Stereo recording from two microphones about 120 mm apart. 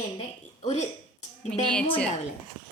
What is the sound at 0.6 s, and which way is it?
Speech, 70° left (ahead or behind).